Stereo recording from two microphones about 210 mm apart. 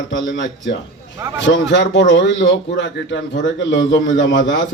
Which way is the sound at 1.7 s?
55° left (ahead or behind).